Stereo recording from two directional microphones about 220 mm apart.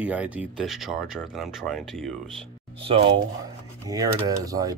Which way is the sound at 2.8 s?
25° right (ahead or behind).